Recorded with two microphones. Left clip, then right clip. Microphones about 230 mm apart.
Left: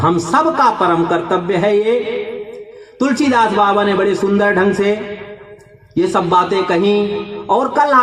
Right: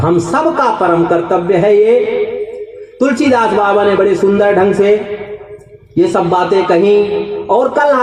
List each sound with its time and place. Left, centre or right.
0.0 s a woman's voice: left
3.0 s a woman's voice: left
6.0 s a woman's voice: left